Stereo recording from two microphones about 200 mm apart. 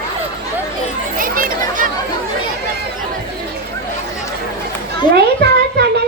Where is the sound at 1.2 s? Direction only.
45° right (ahead or behind).